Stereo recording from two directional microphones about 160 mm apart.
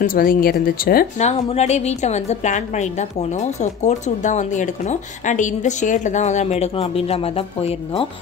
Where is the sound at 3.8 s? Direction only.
50° left (ahead or behind).